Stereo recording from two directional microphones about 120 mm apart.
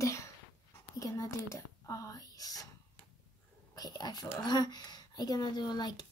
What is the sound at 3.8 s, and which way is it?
Speech, 35° left (ahead or behind).